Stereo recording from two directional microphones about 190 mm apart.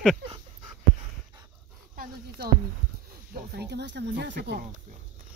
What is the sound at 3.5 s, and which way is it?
Speech, 60° right (ahead or behind).